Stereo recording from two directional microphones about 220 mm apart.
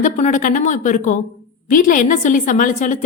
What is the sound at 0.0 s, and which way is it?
A woman's voice, 35° left (ahead or behind).